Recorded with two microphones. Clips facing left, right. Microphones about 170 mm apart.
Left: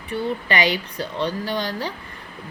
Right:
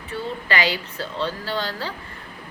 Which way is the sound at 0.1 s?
20° left (ahead or behind).